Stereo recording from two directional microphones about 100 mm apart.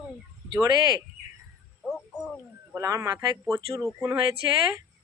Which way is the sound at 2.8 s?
30° right (ahead or behind).